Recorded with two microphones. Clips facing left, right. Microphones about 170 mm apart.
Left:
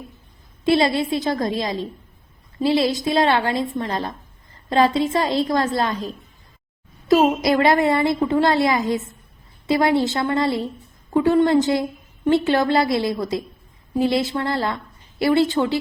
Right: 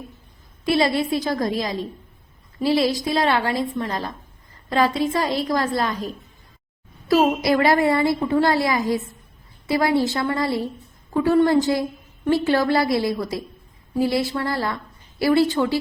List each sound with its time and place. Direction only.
0.6 s a woman's voice: 25° left (ahead or behind)